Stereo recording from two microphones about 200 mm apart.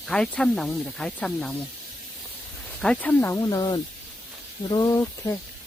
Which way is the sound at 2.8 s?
5° left (ahead or behind).